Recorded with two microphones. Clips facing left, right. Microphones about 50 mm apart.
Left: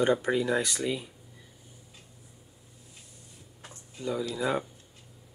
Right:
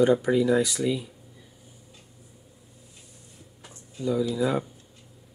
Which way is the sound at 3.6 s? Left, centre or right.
Left.